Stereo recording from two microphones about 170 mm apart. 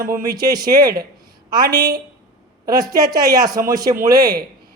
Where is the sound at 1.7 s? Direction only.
75° right (ahead or behind).